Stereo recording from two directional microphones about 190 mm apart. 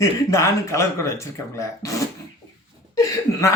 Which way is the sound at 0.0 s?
15° left (ahead or behind).